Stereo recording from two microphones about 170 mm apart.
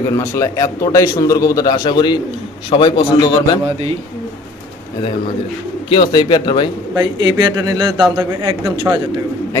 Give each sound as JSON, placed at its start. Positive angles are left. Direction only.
{"t": 0.1, "sound": "a man's voice", "side_deg": 15}
{"t": 5.9, "sound": "a man's voice", "side_deg": 30}
{"t": 7.0, "sound": "a man's voice", "side_deg": -25}